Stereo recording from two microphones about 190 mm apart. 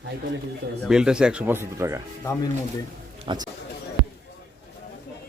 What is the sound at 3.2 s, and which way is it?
Speech, 25° right (ahead or behind).